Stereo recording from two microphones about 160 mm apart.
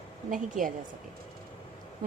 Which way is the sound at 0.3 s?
55° right (ahead or behind).